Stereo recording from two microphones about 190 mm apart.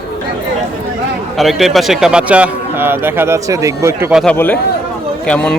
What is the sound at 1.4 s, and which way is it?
A man's voice, centre (ahead or behind).